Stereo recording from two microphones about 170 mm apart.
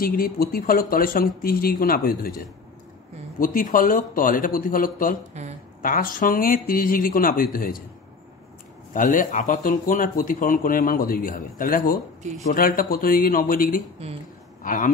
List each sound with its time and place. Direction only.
0.0 s speech: 60° left (ahead or behind)
3.3 s speech: 55° left (ahead or behind)
5.4 s a woman's voice: 40° right (ahead or behind)
5.8 s speech: 55° left (ahead or behind)
8.9 s speech: 50° left (ahead or behind)